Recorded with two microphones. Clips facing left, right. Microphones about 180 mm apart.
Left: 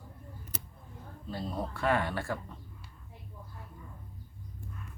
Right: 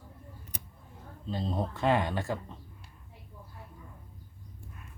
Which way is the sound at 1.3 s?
20° right (ahead or behind).